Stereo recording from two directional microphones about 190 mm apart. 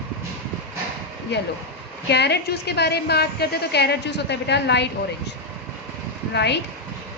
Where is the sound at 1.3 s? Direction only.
65° left (ahead or behind).